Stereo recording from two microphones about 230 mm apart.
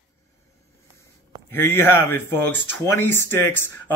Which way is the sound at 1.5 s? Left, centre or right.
Centre.